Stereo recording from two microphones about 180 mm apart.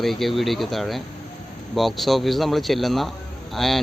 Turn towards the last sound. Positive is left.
turn(degrees=0)  # may be behind; listen again after turning